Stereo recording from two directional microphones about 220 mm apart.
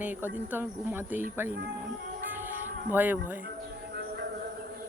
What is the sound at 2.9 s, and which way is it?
Speech, 10° right (ahead or behind).